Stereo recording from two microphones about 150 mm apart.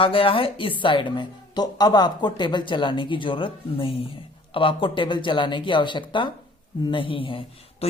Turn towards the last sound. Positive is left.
turn(degrees=35)  # may be behind; listen again after turning